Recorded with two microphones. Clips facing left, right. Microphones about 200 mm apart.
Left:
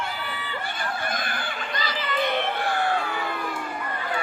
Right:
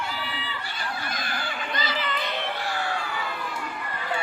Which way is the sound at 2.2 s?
55° left (ahead or behind).